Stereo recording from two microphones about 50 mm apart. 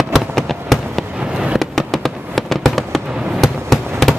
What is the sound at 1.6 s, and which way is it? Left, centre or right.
Fireworks, centre.